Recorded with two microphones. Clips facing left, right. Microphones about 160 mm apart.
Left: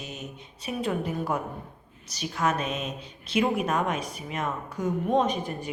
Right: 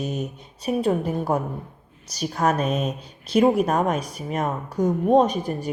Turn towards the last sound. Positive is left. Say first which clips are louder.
# right 5 dB
turn(degrees=-40)  # may be behind; listen again after turning